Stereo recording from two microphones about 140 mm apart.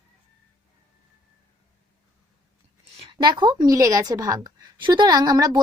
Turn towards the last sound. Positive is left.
turn(degrees=-25)  # may be behind; listen again after turning